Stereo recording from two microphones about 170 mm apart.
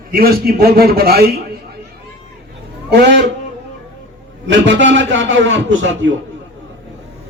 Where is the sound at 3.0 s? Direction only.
90° right.